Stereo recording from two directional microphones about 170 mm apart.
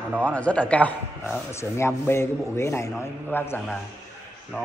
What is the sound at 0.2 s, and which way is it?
A man's voice, 5° left (ahead or behind).